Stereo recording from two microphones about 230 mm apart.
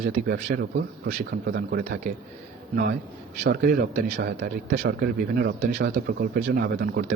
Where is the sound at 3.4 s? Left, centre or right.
Right.